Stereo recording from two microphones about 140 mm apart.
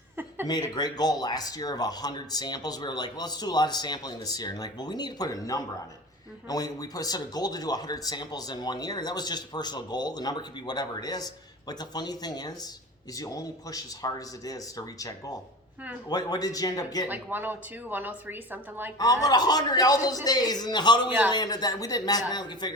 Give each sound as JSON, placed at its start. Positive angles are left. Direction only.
{"t": 0.4, "sound": "speech", "side_deg": 30}
{"t": 17.1, "sound": "a woman's voice", "side_deg": -15}
{"t": 18.9, "sound": "a man's voice", "side_deg": 25}